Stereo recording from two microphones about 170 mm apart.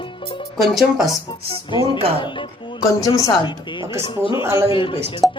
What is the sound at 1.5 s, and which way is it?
A woman's voice, 30° left (ahead or behind).